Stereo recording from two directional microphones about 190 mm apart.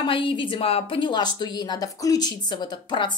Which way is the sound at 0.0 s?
25° left (ahead or behind).